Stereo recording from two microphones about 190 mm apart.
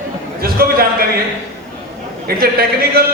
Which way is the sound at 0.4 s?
50° right (ahead or behind).